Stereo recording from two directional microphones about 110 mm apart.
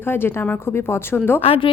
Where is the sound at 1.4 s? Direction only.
60° left (ahead or behind).